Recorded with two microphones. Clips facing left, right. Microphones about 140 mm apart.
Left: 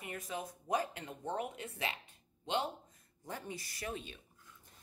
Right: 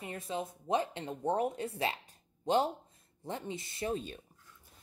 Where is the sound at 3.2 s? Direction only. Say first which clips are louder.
Right 5 dB; 25° right (ahead or behind).